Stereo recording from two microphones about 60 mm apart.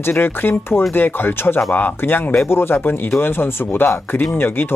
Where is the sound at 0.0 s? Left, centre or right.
Left.